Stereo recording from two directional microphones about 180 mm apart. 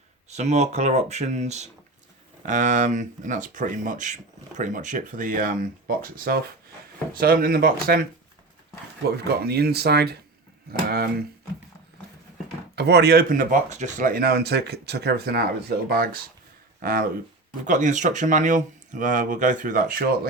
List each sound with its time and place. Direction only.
0.3 s speech: 40° right (ahead or behind); by 8.0 s 55° right (ahead or behind)
9.0 s speech: 60° right (ahead or behind)
12.7 s speech: 65° right (ahead or behind)
16.8 s speech: 55° right (ahead or behind)